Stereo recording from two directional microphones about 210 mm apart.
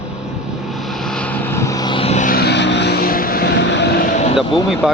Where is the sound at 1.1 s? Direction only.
5° left (ahead or behind); by 4.7 s 25° left (ahead or behind).